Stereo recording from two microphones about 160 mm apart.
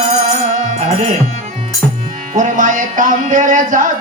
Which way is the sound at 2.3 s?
50° right (ahead or behind).